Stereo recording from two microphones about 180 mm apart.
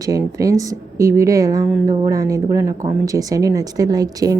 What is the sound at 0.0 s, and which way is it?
A woman's voice, 20° right (ahead or behind).